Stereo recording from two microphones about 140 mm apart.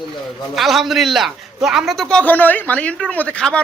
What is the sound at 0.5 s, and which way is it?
A man's voice, centre (ahead or behind).